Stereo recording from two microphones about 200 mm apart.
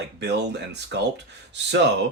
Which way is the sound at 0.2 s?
60° right (ahead or behind).